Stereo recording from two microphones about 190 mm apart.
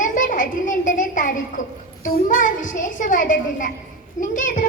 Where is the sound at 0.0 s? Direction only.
45° left (ahead or behind).